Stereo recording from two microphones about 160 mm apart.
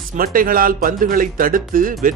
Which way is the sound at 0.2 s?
60° right (ahead or behind).